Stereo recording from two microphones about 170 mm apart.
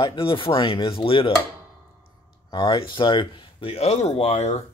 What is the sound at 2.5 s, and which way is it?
Speech, 25° left (ahead or behind).